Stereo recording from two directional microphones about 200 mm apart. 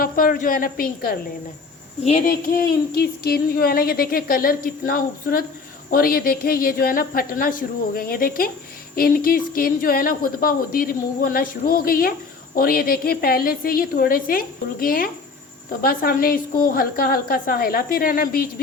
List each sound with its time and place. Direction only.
0.0 s a woman's voice: 45° left (ahead or behind)
2.0 s speech: 35° left (ahead or behind)
2.5 s speech: 50° left (ahead or behind)